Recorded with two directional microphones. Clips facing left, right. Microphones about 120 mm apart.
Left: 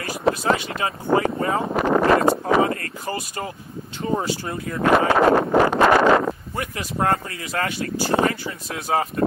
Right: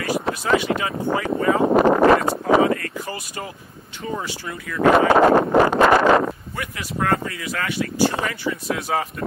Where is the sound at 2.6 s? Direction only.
35° left (ahead or behind).